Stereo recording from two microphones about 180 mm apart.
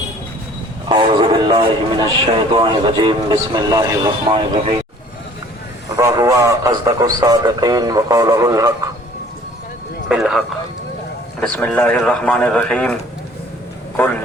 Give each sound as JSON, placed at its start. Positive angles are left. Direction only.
{"t": 0.9, "sound": "a man's voice", "side_deg": -25}
{"t": 6.0, "sound": "a man's voice", "side_deg": -15}
{"t": 10.1, "sound": "speech", "side_deg": 0}